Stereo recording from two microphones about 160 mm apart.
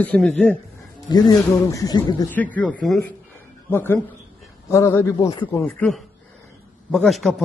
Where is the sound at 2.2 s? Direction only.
10° left (ahead or behind).